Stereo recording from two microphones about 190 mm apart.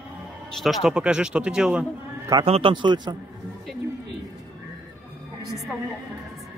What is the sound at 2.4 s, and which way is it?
Speech, 30° right (ahead or behind).